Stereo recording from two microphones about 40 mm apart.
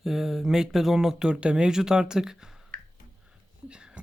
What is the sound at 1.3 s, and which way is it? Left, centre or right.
Speech, right.